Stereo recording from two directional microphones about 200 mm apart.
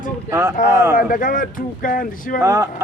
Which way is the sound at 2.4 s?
15° right (ahead or behind).